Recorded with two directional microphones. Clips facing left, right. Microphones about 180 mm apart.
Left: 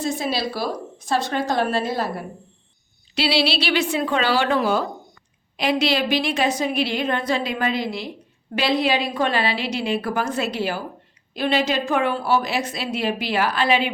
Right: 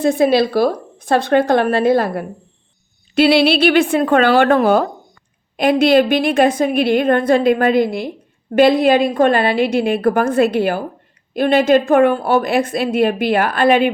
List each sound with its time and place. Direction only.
0.0 s a woman's voice: 55° right (ahead or behind)